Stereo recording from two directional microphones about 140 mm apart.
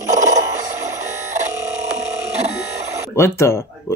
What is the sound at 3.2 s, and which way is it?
Speech, 20° left (ahead or behind).